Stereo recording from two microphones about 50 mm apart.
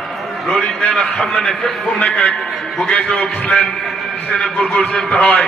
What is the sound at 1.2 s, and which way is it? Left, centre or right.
Speech, centre.